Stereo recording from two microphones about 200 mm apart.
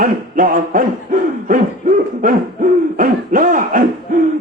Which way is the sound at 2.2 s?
45° right (ahead or behind).